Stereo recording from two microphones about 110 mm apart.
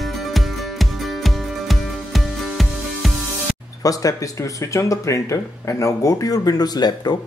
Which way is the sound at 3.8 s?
35° left (ahead or behind).